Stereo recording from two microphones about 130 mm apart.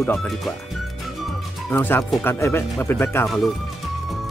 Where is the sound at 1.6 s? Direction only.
15° left (ahead or behind).